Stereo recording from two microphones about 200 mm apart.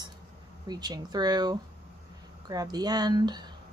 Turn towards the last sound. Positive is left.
turn(degrees=-20)  # may be behind; listen again after turning